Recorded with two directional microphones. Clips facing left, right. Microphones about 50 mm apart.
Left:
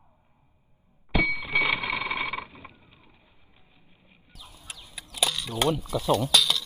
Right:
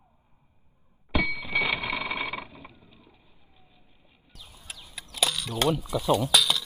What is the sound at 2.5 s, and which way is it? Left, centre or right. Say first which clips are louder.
Vehicle: even; centre.